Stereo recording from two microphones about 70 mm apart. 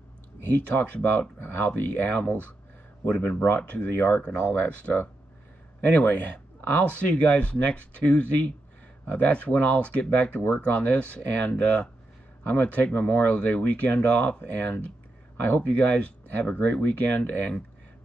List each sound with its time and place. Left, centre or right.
0.4 s speech: left